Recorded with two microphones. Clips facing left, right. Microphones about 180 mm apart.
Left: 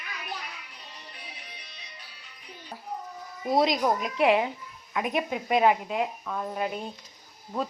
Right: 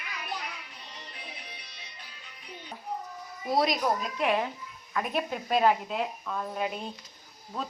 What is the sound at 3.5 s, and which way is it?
A woman's voice, 20° left (ahead or behind).